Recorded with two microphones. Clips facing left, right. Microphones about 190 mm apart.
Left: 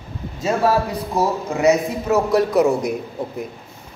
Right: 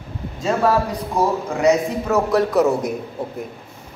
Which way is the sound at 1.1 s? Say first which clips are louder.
Even; 5° left (ahead or behind).